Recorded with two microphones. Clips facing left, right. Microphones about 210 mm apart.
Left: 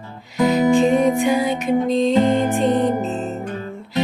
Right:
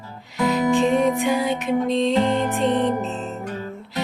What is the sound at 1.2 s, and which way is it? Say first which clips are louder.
Music: left 3 dB; centre (ahead or behind).